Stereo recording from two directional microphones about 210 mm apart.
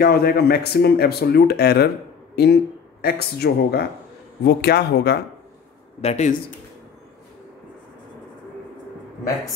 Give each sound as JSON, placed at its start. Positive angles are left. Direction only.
{"t": 0.0, "sound": "speech", "side_deg": 45}
{"t": 5.9, "sound": "speech", "side_deg": 30}